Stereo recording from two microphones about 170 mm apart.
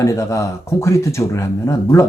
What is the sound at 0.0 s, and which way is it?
Speech, 15° left (ahead or behind).